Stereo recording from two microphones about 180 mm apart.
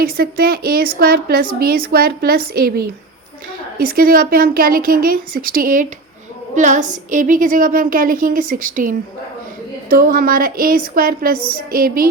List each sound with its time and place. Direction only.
0.0 s a woman's voice: 55° right (ahead or behind)